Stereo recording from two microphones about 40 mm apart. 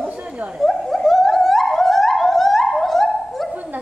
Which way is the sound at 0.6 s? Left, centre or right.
Centre.